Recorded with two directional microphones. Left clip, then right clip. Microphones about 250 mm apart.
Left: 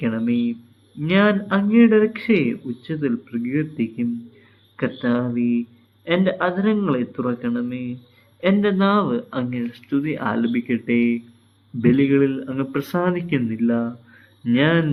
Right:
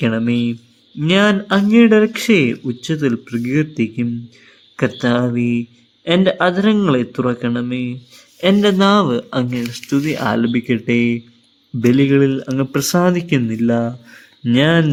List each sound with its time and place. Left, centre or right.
0.0 s speech: right